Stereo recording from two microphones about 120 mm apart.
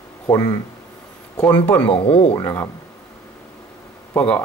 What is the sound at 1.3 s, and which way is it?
Speech, 10° left (ahead or behind).